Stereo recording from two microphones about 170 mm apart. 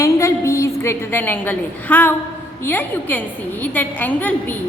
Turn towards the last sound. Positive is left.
turn(degrees=10)  # may be behind; listen again after turning